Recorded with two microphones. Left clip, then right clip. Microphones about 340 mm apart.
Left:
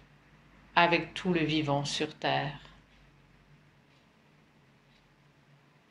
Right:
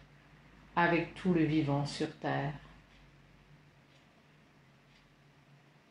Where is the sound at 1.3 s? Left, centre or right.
Left.